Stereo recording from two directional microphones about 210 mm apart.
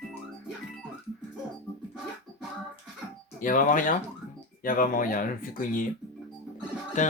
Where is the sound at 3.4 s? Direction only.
40° left (ahead or behind).